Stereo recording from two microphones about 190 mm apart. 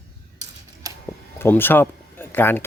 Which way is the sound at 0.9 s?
20° right (ahead or behind).